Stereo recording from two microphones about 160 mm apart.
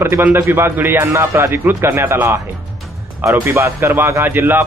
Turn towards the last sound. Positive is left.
turn(degrees=-10)  # may be behind; listen again after turning